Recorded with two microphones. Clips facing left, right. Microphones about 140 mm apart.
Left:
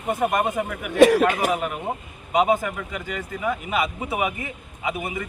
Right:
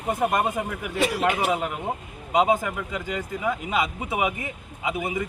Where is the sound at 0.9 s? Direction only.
75° left (ahead or behind).